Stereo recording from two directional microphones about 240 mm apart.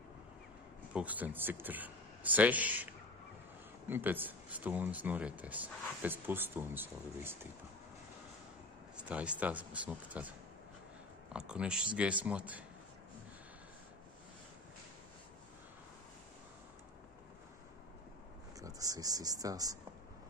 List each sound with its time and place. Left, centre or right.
0.9 s speech: centre
3.9 s speech: centre
8.9 s speech: centre
11.3 s speech: centre
18.6 s speech: centre